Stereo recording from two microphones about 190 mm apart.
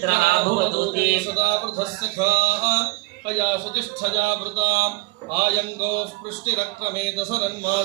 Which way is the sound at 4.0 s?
55° right (ahead or behind).